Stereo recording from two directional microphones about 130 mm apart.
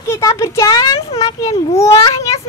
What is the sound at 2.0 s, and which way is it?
Speech, 25° left (ahead or behind).